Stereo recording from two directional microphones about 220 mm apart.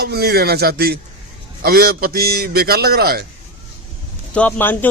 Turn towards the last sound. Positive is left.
turn(degrees=10)  # may be behind; listen again after turning